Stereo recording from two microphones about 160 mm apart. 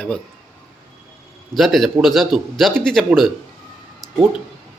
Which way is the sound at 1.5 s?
Centre (ahead or behind).